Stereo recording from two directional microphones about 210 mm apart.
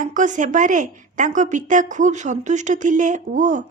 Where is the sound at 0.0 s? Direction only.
35° right (ahead or behind).